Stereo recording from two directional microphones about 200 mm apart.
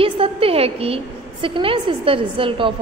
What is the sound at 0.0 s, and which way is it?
A woman's voice, 30° right (ahead or behind).